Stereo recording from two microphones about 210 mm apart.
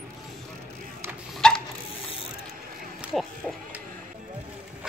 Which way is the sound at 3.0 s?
Centre (ahead or behind).